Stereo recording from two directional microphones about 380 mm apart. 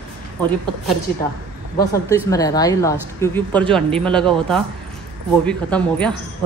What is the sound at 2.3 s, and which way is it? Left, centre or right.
A woman's voice, centre.